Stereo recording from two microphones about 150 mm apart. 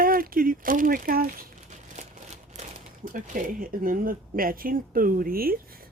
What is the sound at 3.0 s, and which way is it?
Speech, 65° right (ahead or behind).